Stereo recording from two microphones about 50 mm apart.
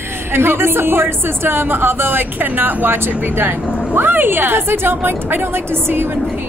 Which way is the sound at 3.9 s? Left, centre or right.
Right.